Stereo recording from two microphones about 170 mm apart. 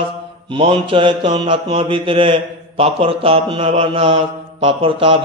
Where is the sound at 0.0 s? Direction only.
35° right (ahead or behind).